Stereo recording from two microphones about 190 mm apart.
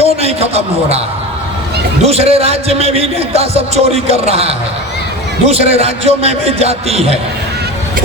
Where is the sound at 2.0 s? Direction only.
30° right (ahead or behind).